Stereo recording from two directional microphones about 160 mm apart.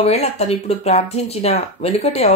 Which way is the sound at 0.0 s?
40° left (ahead or behind).